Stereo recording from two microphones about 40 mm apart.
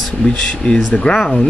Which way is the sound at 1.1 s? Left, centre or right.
Centre.